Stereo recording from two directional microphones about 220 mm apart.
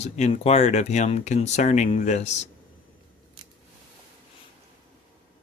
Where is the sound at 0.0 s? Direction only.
30° left (ahead or behind).